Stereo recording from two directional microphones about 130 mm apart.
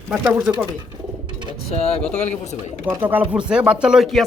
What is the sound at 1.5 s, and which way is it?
Speech, 50° left (ahead or behind).